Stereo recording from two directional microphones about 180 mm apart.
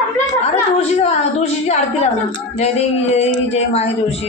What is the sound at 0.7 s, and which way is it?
Speech, 35° left (ahead or behind).